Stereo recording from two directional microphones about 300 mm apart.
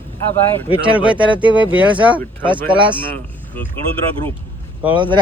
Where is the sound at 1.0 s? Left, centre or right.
Centre.